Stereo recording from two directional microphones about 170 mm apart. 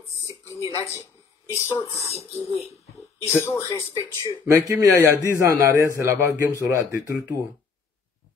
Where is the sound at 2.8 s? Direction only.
20° left (ahead or behind).